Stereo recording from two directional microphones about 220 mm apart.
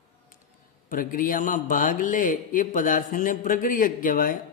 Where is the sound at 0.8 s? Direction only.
40° left (ahead or behind).